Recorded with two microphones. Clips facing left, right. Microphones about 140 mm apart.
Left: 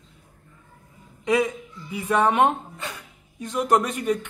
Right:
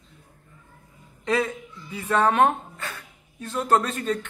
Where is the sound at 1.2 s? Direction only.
15° left (ahead or behind).